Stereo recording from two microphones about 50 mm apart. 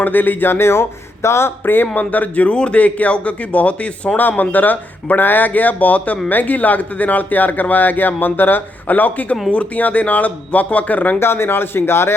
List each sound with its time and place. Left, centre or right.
0.0 s speech: left
2.0 s a man's voice: left
4.2 s speech: left
11.2 s speech: left